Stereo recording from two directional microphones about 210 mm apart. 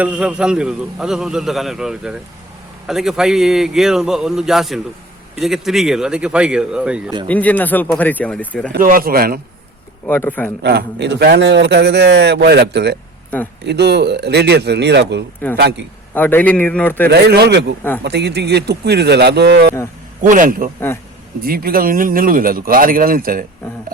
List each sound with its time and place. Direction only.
0.0 s a man's voice: 5° right (ahead or behind)
7.3 s speech: 5° left (ahead or behind)
8.7 s a man's voice: 40° right (ahead or behind)
10.1 s speech: 10° left (ahead or behind)
10.6 s a man's voice: 55° right (ahead or behind)
15.4 s speech: 10° left (ahead or behind)
17.1 s a man's voice: 50° right (ahead or behind)
20.2 s a man's voice: 40° right (ahead or behind)